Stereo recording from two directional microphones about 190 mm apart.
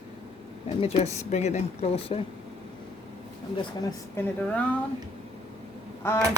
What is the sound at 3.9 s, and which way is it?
Speech, 15° left (ahead or behind).